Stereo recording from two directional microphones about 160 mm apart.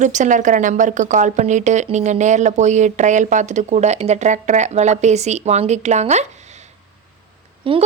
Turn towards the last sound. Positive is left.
turn(degrees=-35)  # may be behind; listen again after turning